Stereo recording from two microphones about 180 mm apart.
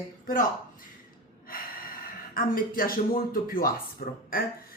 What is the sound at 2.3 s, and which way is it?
Speech, 55° left (ahead or behind).